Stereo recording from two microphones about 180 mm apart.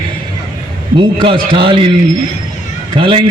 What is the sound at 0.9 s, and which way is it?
Speech, 30° right (ahead or behind).